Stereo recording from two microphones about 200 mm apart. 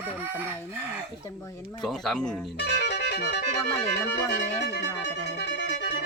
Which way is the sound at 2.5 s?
60° left (ahead or behind).